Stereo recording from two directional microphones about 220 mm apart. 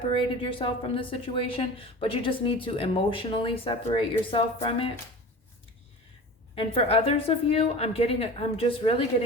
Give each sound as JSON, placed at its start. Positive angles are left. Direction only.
{"t": 0.1, "sound": "a woman's voice", "side_deg": 25}
{"t": 6.6, "sound": "a woman's voice", "side_deg": 25}